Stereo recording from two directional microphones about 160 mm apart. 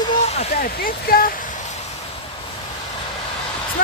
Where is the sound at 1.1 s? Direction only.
65° left (ahead or behind).